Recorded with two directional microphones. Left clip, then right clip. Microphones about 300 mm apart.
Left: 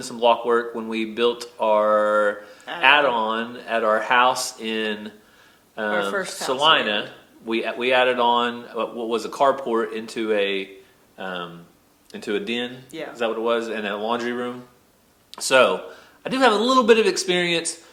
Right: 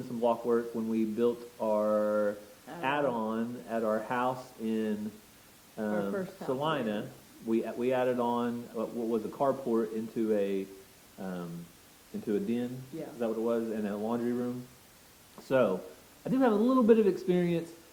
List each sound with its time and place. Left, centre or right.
0.3 s speech: centre
1.3 s speech: left
1.7 s speech: centre
9.1 s speech: centre